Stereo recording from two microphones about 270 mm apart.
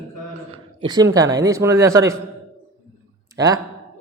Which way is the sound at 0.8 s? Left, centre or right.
Centre.